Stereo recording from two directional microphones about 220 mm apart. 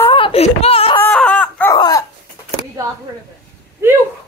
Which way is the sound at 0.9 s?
10° left (ahead or behind).